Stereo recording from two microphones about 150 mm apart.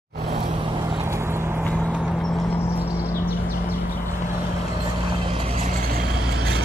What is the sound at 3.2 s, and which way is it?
Vehicle, 90° left.